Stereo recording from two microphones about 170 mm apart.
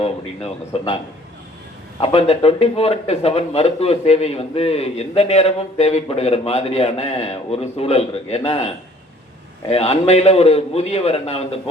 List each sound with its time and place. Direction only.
0.7 s speech: 35° left (ahead or behind)
2.0 s speech: 35° left (ahead or behind)